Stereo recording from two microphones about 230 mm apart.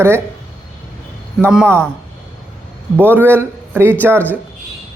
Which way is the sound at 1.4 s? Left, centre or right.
Centre.